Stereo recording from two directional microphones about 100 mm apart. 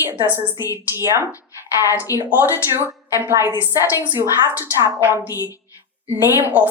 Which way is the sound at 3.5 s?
25° right (ahead or behind).